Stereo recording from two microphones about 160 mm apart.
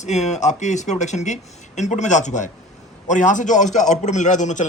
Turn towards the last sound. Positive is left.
turn(degrees=50)  # may be behind; listen again after turning